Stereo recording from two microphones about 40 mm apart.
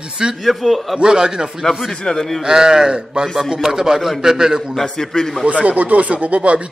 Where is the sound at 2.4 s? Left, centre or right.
Centre.